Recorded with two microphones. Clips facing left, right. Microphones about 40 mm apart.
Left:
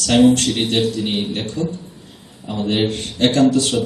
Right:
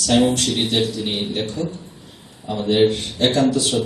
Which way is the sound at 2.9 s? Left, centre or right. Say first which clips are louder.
Left 1 dB; left.